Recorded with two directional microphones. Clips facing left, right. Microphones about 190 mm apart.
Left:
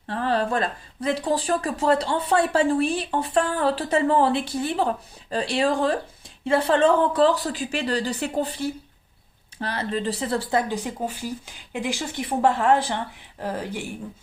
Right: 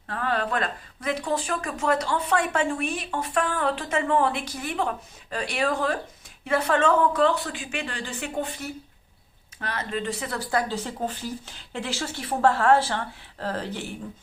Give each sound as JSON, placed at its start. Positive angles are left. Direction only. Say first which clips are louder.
{"t": 0.1, "sound": "speech", "louder": "left 4 dB", "side_deg": 30}
{"t": 10.7, "sound": "speech", "louder": "left 2 dB", "side_deg": 10}